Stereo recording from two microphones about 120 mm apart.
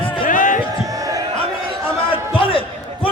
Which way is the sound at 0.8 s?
30° right (ahead or behind).